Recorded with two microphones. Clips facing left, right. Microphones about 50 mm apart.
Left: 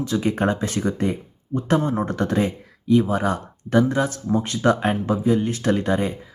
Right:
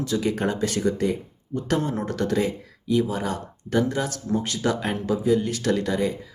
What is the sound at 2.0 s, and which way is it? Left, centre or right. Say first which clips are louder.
Speech: left 2 dB; left.